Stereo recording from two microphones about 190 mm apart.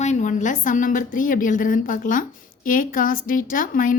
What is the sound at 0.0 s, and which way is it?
A woman's voice, 40° left (ahead or behind).